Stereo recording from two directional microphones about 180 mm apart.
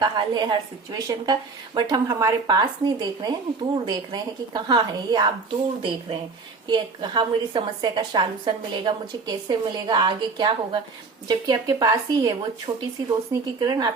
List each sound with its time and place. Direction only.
0.0 s speech: 25° right (ahead or behind)
6.7 s speech: 25° right (ahead or behind)